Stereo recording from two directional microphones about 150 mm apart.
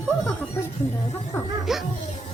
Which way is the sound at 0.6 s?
15° left (ahead or behind).